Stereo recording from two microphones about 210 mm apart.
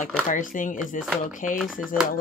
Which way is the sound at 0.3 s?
40° left (ahead or behind).